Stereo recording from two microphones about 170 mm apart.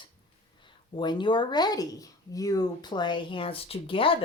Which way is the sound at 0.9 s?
25° left (ahead or behind).